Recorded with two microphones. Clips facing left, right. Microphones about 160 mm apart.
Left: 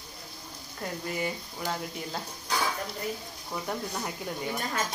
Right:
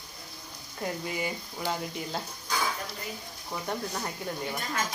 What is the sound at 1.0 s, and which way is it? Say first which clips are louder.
Speech: left 1 dB; centre (ahead or behind).